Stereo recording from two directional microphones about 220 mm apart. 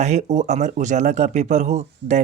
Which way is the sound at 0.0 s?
30° right (ahead or behind).